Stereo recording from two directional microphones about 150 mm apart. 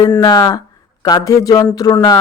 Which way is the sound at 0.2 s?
25° left (ahead or behind).